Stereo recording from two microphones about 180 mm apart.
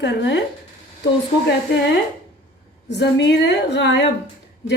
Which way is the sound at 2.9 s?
75° left (ahead or behind).